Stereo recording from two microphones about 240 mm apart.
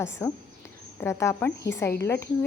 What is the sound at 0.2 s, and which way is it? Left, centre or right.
A woman's voice, centre.